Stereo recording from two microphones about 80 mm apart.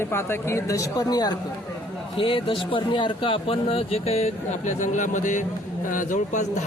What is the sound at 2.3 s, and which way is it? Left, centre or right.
A man's voice, left.